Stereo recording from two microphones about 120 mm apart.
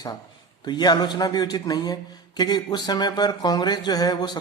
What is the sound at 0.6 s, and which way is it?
Speech, 35° left (ahead or behind).